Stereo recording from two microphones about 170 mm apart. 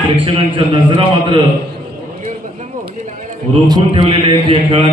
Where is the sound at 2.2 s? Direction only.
45° right (ahead or behind).